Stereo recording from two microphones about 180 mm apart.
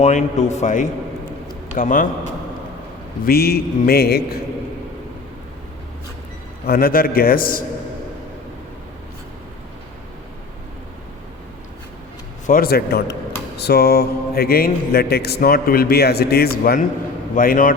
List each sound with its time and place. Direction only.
0.0 s a man's voice: 40° left (ahead or behind)
3.2 s speech: 60° left (ahead or behind)
6.7 s speech: 55° left (ahead or behind)
12.5 s a man's voice: 55° left (ahead or behind)